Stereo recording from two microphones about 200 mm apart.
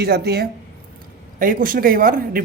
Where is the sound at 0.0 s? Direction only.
55° right (ahead or behind).